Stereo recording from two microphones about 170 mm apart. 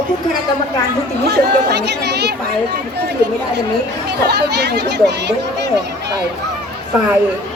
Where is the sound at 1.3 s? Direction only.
80° right.